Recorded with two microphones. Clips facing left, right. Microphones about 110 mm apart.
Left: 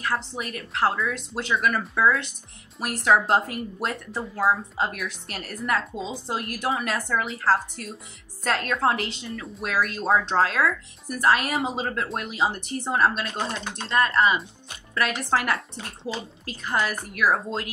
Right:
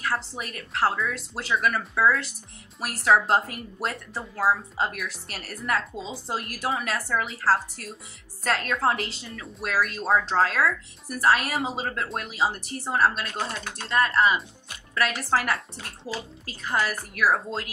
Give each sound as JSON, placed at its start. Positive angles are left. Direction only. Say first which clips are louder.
{"t": 0.0, "sound": "speech", "louder": "left 1 dB", "side_deg": 0}
{"t": 13.3, "sound": "speech", "louder": "left 2 dB", "side_deg": 20}
{"t": 13.8, "sound": "speech", "louder": "left 1 dB", "side_deg": 0}